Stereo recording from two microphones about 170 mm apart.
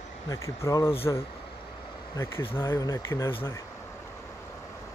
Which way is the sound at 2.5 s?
15° left (ahead or behind).